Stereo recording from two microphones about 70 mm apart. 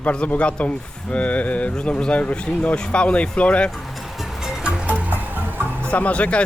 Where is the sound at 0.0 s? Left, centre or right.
Centre.